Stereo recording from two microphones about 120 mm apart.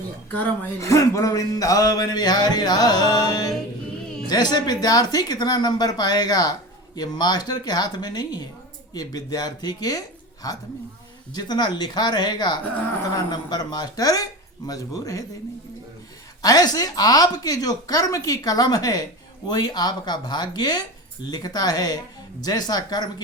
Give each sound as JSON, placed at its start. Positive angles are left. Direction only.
{"t": 0.8, "sound": "speech", "side_deg": 25}
{"t": 11.3, "sound": "speech", "side_deg": 35}
{"t": 16.4, "sound": "speech", "side_deg": 30}